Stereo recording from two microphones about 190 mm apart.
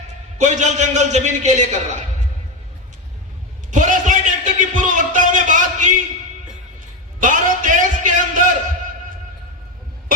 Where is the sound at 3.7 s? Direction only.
40° right (ahead or behind).